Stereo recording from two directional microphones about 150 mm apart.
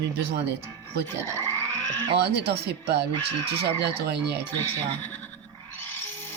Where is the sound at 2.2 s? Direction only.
90° right.